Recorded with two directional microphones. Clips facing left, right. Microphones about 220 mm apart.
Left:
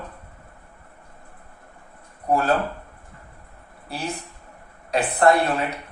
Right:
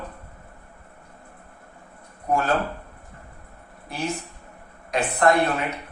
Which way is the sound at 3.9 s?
35° left (ahead or behind).